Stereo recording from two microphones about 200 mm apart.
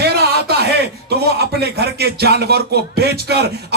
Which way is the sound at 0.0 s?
55° right (ahead or behind).